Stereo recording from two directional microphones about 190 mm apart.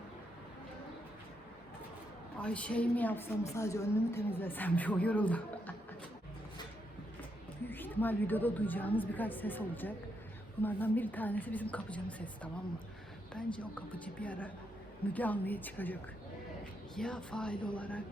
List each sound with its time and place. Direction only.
2.4 s a woman's voice: 5° left (ahead or behind)
7.7 s a woman's voice: 10° left (ahead or behind)